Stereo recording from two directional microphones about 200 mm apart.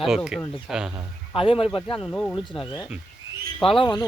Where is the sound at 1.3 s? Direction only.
25° left (ahead or behind).